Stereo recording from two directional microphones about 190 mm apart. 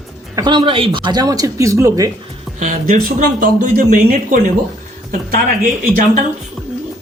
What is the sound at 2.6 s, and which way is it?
Speech, 40° right (ahead or behind).